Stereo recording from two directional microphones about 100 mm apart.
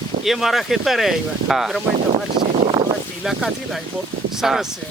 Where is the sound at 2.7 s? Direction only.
55° right (ahead or behind).